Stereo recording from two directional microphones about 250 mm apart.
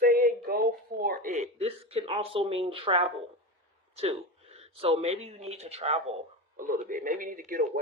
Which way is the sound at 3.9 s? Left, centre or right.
Right.